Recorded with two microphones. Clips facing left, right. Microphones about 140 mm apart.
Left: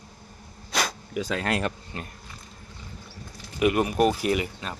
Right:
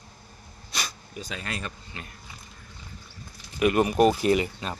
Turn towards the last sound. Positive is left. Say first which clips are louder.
# right 3 dB
turn(degrees=0)  # may be behind; listen again after turning